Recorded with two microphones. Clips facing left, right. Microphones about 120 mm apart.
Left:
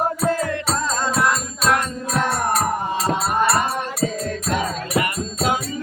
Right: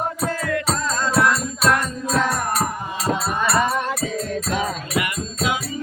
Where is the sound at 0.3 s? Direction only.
35° left (ahead or behind).